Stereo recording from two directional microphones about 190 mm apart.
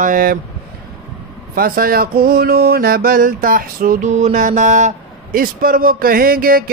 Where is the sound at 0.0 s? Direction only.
45° right (ahead or behind).